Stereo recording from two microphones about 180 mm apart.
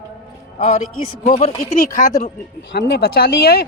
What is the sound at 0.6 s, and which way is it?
Speech, 40° left (ahead or behind).